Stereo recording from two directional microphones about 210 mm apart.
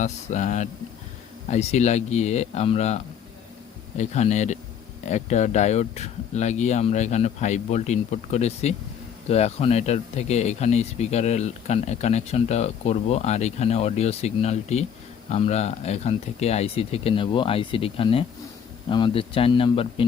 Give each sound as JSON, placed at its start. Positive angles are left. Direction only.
{"t": 0.0, "sound": "speech", "side_deg": 35}